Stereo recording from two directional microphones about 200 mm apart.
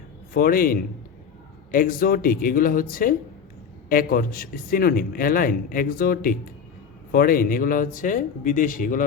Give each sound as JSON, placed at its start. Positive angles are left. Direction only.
{"t": 0.3, "sound": "a man's voice", "side_deg": 45}